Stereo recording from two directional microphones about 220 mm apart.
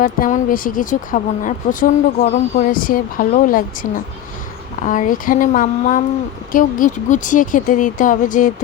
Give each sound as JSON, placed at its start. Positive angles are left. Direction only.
{"t": 0.0, "sound": "speech", "side_deg": 35}